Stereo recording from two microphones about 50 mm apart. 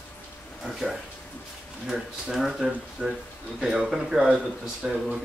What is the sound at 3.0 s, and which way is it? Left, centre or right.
Speech, centre.